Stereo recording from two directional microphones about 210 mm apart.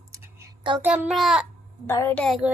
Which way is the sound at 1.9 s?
10° left (ahead or behind).